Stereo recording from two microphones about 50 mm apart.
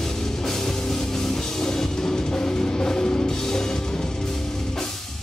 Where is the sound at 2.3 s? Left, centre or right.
Centre.